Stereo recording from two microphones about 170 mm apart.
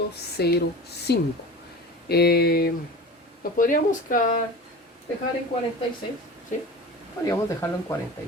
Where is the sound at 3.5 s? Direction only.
55° left (ahead or behind).